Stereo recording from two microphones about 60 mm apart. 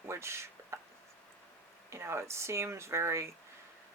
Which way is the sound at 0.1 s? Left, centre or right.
Right.